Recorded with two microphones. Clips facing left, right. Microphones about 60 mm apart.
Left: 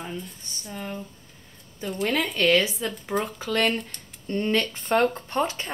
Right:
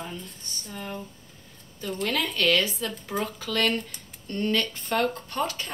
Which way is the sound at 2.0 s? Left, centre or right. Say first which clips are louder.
Left 3 dB; left.